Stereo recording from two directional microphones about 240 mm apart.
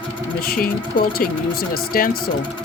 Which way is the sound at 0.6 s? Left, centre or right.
Left.